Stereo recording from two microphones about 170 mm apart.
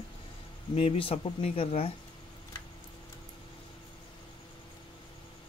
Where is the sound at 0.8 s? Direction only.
35° left (ahead or behind).